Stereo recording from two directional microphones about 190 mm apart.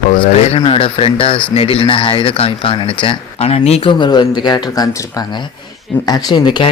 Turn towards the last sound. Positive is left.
turn(degrees=25)  # may be behind; listen again after turning